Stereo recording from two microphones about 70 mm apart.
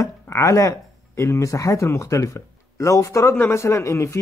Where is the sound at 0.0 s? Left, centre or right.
Left.